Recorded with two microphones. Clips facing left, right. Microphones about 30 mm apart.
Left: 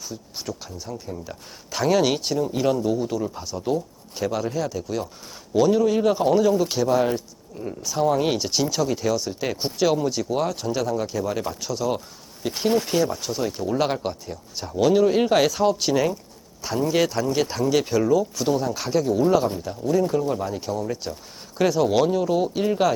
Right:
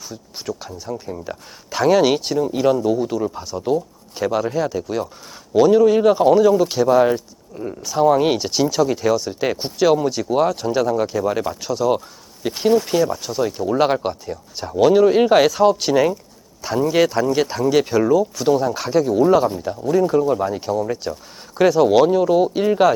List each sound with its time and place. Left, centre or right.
0.1 s speech: centre
12.8 s speech: centre
13.7 s speech: centre